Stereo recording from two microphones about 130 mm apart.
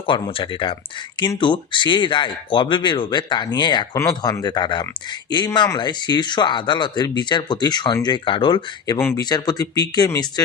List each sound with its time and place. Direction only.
0.1 s speech: 40° left (ahead or behind)
9.0 s speech: 15° left (ahead or behind)
9.3 s speech: 30° left (ahead or behind)